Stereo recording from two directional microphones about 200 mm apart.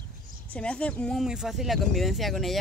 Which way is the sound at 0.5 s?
5° left (ahead or behind).